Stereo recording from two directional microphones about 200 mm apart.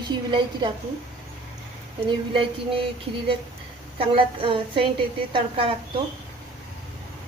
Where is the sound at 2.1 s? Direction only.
25° right (ahead or behind).